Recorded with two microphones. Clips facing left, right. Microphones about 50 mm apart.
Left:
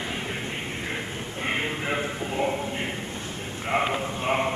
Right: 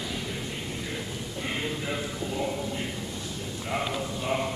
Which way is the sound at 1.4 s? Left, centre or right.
Left.